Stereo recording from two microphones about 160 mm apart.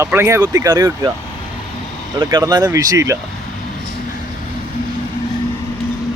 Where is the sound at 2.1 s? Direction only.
25° right (ahead or behind).